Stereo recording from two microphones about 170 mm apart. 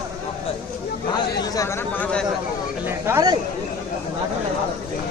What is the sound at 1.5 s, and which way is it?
Speech, 15° left (ahead or behind).